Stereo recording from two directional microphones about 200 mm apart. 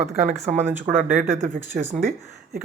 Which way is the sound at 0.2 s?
35° right (ahead or behind).